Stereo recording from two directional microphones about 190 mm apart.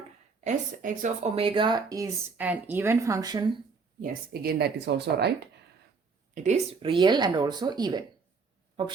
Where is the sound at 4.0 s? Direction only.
55° right (ahead or behind).